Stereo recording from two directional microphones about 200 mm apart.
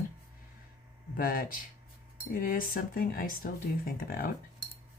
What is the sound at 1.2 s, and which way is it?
Speech, 45° left (ahead or behind).